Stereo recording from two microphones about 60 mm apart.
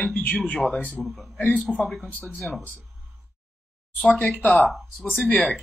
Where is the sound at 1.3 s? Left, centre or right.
Left.